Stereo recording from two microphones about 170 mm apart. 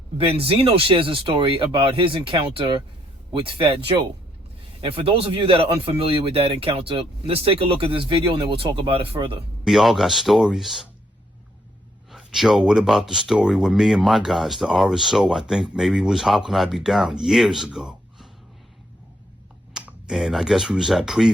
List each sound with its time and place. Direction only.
0.2 s speech: 30° right (ahead or behind)
9.6 s speech: centre (ahead or behind)
12.1 s speech: centre (ahead or behind)
19.7 s speech: 5° right (ahead or behind)